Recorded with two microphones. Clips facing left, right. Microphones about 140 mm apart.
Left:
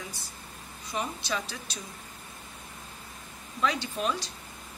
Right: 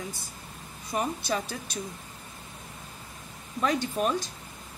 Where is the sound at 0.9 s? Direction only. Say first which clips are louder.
Right 4 dB; 50° right (ahead or behind).